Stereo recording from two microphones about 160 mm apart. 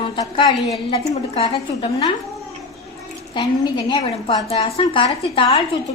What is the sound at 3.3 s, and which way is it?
A woman's voice, 25° left (ahead or behind).